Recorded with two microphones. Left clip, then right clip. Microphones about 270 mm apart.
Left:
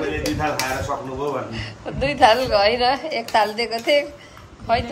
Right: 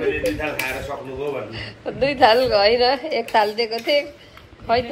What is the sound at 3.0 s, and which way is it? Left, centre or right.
Speech, left.